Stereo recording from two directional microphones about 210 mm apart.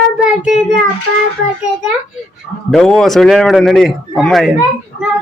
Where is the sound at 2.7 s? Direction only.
5° left (ahead or behind).